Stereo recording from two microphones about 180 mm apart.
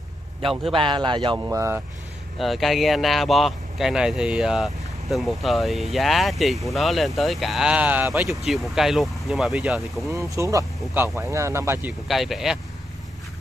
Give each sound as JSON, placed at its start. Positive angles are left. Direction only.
{"t": 0.7, "sound": "speech", "side_deg": -25}
{"t": 2.3, "sound": "speech", "side_deg": 0}
{"t": 10.0, "sound": "speech", "side_deg": -15}
{"t": 12.1, "sound": "speech", "side_deg": 0}